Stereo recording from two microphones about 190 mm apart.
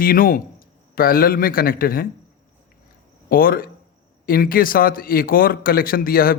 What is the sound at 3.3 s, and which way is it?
A man's voice, 50° left (ahead or behind).